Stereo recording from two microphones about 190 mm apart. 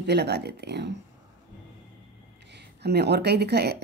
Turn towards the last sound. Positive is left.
turn(degrees=-60)  # may be behind; listen again after turning